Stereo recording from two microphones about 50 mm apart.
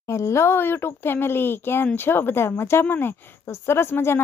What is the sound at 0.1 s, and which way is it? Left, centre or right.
Speech, left.